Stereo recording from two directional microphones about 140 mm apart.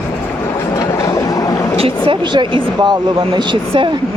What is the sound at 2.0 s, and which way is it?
Speech, 35° right (ahead or behind).